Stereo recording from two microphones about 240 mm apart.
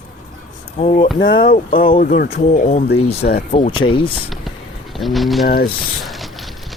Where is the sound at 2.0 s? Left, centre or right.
Left.